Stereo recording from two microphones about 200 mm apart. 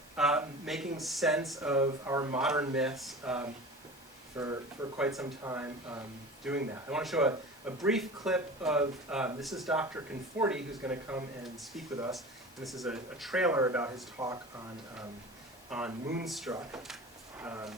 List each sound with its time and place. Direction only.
0.2 s a sound: 5° right (ahead or behind)
0.9 s speech: centre (ahead or behind)
1.7 s speech: 15° right (ahead or behind)
2.4 s speech: 5° right (ahead or behind)
6.5 s speech: 5° right (ahead or behind)
9.8 s speech: 10° right (ahead or behind)
15.7 s speech: centre (ahead or behind)
16.5 s speech: 15° right (ahead or behind)